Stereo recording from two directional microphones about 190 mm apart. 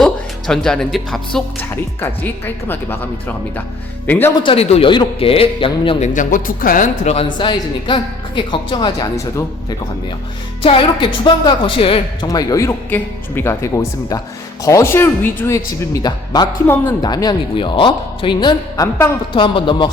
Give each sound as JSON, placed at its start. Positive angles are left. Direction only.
{"t": 0.0, "sound": "speech", "side_deg": 5}
{"t": 4.4, "sound": "speech", "side_deg": 30}
{"t": 6.1, "sound": "speech", "side_deg": 45}